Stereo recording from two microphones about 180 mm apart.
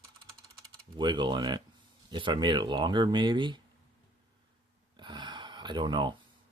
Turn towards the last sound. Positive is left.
turn(degrees=-25)  # may be behind; listen again after turning